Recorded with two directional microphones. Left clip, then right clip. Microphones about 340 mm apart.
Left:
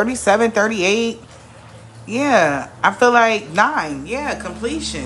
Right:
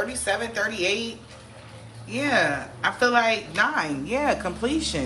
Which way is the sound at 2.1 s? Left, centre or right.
Centre.